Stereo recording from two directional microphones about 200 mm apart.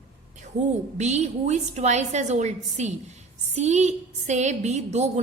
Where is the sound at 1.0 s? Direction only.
35° right (ahead or behind).